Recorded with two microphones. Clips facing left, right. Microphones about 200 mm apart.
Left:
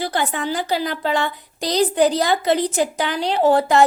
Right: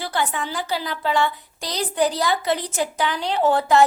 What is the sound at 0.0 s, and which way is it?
A woman's voice, 20° left (ahead or behind).